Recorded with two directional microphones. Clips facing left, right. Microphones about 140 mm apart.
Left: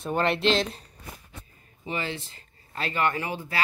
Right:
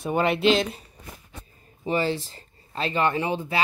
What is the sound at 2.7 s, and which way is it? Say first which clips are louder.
Speech: right 3 dB; 20° right (ahead or behind).